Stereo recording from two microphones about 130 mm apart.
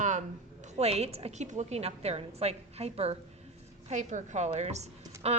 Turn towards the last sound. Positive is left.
turn(degrees=-55)  # may be behind; listen again after turning